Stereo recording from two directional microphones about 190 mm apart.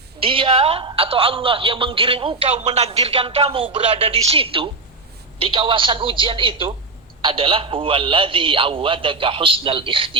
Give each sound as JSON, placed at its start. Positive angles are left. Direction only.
{"t": 0.2, "sound": "a man's voice", "side_deg": -25}